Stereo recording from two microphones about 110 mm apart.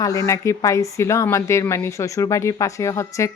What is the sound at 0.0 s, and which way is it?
Speech, 30° left (ahead or behind).